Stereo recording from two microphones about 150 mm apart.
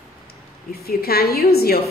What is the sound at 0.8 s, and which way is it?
Speech, 90° left.